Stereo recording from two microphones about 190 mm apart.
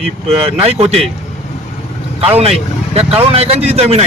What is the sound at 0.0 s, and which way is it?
A man's voice, 30° right (ahead or behind).